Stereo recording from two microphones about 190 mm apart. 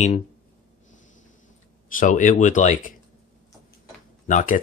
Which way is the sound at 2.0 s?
45° left (ahead or behind).